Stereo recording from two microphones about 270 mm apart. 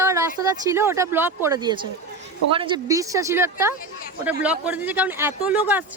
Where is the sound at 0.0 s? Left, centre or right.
Centre.